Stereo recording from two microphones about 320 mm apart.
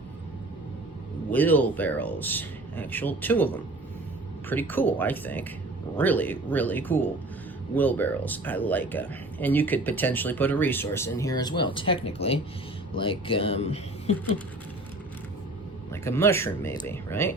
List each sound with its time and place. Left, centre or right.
1.3 s speech: centre
15.9 s speech: centre